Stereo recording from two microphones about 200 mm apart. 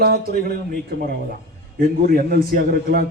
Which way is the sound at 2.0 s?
45° right (ahead or behind).